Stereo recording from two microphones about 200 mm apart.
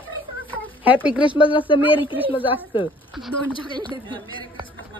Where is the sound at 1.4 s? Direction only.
25° left (ahead or behind).